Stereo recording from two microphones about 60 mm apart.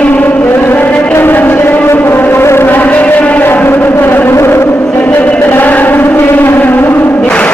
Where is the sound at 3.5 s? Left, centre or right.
Left.